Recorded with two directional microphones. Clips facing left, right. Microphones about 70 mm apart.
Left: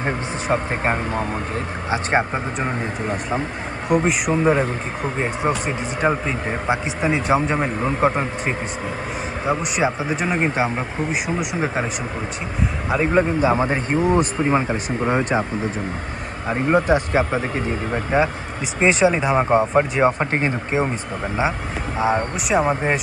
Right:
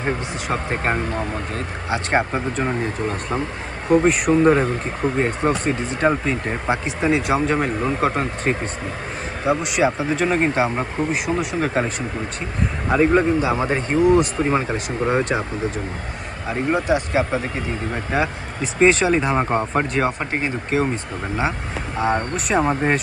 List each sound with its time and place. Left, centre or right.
0.0 s a sound: centre
0.9 s speech: centre
1.5 s speech: left; by 6.6 s centre
6.7 s speech: centre
8.1 s speech: centre
12.9 s speech: centre
13.4 s speech: left
16.8 s speech: left
17.9 s speech: left
18.6 s speech: centre
20.1 s speech: left
20.7 s speech: centre